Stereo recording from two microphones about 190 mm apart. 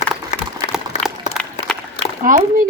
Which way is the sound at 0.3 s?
40° left (ahead or behind).